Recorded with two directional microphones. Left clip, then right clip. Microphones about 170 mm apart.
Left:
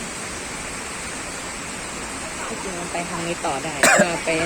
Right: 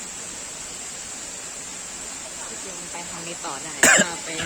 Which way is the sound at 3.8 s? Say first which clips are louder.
Left 1 dB; 60° right (ahead or behind).